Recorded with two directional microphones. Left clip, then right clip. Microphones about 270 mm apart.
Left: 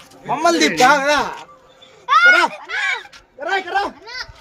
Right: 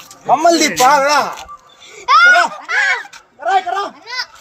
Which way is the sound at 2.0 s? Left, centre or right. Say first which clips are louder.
Right 4 dB; right.